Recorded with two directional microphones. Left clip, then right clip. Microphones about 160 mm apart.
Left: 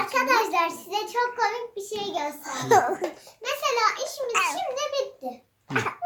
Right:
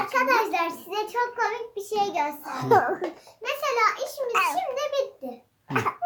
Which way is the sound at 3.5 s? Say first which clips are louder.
Even; 5° left (ahead or behind).